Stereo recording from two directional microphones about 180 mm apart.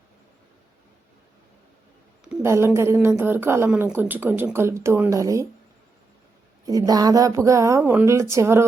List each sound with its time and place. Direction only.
2.2 s a woman's voice: 10° right (ahead or behind)
6.7 s a woman's voice: 20° right (ahead or behind)